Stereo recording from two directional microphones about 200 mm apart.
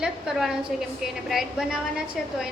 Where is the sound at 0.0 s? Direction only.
Centre (ahead or behind).